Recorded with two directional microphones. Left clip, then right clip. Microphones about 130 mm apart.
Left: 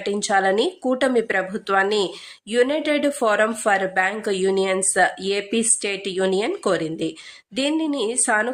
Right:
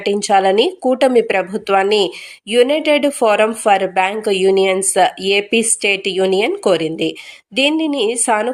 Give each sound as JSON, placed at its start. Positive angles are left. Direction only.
{"t": 0.0, "sound": "speech", "side_deg": -20}